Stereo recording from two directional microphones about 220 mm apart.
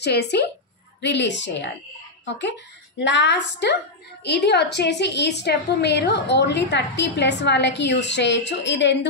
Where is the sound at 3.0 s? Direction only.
55° left (ahead or behind).